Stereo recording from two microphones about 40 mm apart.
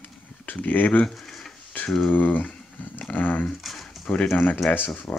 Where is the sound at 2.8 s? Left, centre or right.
Left.